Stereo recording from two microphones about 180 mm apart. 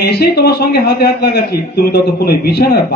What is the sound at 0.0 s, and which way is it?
Speech, 60° left (ahead or behind).